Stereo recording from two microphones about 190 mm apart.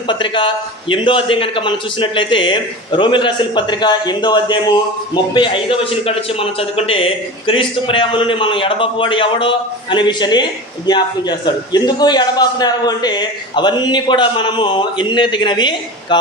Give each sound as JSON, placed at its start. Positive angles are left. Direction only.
{"t": 0.1, "sound": "a man's voice", "side_deg": 25}